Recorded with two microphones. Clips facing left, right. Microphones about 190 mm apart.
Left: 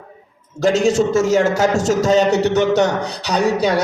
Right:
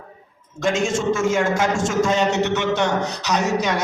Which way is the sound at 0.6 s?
35° left (ahead or behind).